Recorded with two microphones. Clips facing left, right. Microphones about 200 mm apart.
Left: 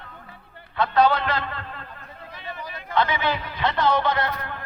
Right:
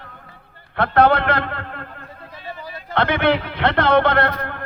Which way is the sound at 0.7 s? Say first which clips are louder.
Right 4 dB; 60° right (ahead or behind).